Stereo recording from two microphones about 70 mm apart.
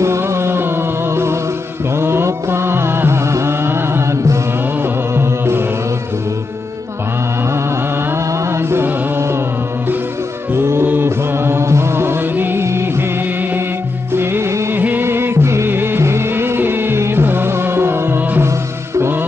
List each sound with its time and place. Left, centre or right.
0.0 s music: right
8.3 s music: right
10.5 s music: right
12.6 s music of bollywood: right
14.1 s music: right
14.8 s music: right